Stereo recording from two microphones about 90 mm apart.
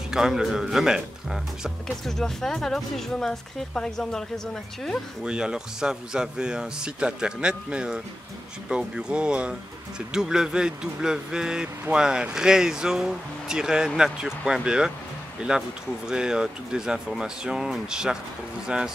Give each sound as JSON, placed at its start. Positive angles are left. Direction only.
{"t": 0.1, "sound": "speech", "side_deg": -5}
{"t": 5.2, "sound": "speech", "side_deg": -10}